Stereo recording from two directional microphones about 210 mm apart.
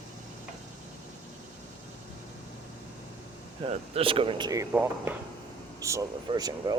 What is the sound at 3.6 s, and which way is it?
Speech, 25° right (ahead or behind).